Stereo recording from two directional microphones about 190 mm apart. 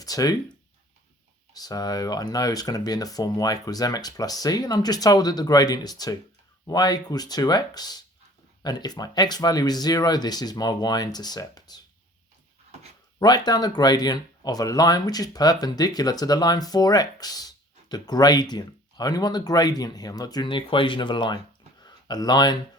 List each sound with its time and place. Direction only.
0.0 s speech: 20° left (ahead or behind)
1.5 s speech: 20° left (ahead or behind)
13.1 s speech: 20° left (ahead or behind)